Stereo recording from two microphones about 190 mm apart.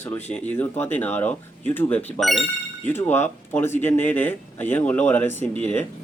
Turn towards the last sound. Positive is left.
turn(degrees=10)  # may be behind; listen again after turning